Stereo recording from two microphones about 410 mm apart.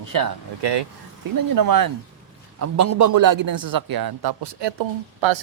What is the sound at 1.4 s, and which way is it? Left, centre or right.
Speech, right.